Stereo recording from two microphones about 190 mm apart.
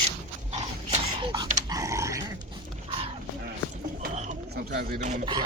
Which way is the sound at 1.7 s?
15° right (ahead or behind).